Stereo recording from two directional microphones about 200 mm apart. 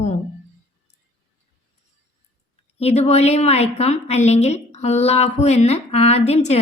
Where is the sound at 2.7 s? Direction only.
30° left (ahead or behind).